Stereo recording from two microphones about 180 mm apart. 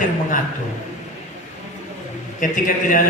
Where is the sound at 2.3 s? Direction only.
45° left (ahead or behind).